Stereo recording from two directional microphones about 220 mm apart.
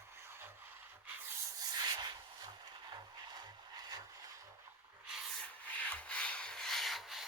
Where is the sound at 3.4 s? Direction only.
20° right (ahead or behind).